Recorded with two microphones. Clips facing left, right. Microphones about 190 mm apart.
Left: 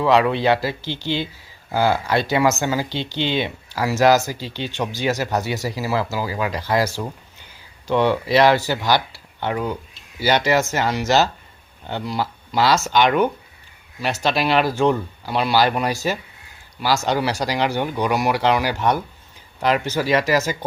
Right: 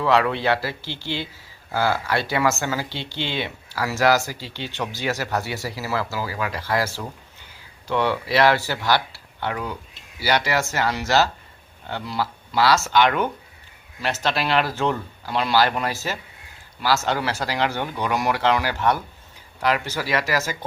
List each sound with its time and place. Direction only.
0.0 s speech: 15° left (ahead or behind)